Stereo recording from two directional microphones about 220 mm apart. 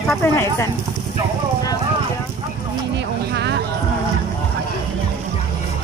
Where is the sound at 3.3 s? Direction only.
50° right (ahead or behind).